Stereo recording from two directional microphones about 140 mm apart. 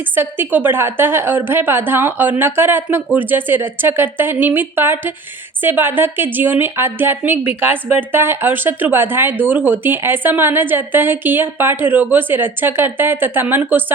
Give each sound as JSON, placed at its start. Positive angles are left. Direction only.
{"t": 0.2, "sound": "a woman's voice", "side_deg": -15}